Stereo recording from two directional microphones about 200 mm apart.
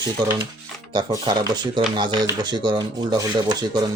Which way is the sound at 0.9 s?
20° right (ahead or behind).